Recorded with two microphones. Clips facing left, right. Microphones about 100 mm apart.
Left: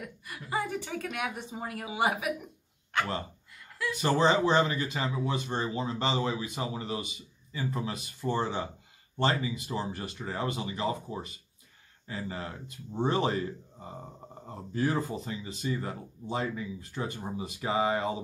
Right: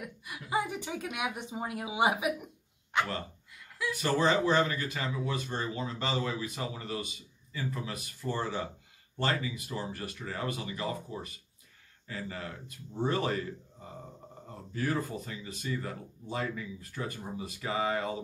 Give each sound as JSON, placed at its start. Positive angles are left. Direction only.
{"t": 0.0, "sound": "a woman's voice", "side_deg": -10}
{"t": 3.9, "sound": "speech", "side_deg": 20}